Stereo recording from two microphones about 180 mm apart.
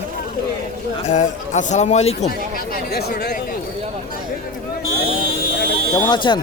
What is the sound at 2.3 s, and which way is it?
Speech, 55° left (ahead or behind).